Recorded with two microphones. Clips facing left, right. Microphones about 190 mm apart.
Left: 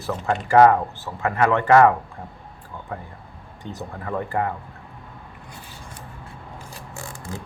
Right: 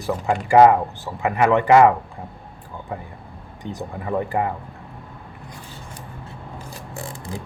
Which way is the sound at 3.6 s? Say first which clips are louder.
Right 3 dB; 15° right (ahead or behind).